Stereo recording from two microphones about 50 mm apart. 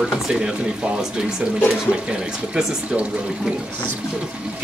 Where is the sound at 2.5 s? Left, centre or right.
Centre.